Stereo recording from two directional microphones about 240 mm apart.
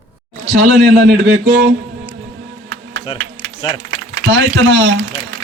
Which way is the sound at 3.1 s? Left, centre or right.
Left.